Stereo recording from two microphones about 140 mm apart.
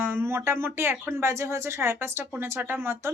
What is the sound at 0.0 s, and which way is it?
Speech, 15° right (ahead or behind).